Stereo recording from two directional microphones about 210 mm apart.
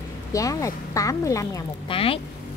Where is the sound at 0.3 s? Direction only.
15° left (ahead or behind).